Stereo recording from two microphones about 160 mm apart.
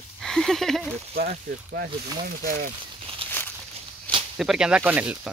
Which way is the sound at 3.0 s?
35° right (ahead or behind).